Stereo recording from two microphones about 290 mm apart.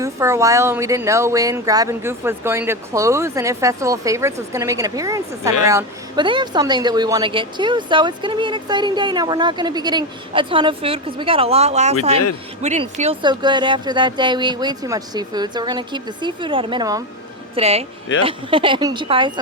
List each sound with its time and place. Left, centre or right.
0.0 s speech: centre